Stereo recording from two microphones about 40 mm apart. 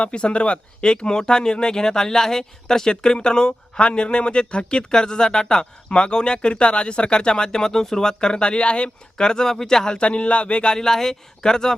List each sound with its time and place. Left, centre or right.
0.0 s speech: left
10.1 s speech: left